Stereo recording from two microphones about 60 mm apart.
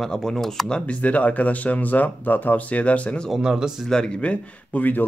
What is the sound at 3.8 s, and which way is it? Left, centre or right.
Speech, centre.